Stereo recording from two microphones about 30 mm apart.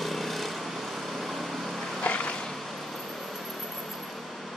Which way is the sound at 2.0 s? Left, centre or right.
Left.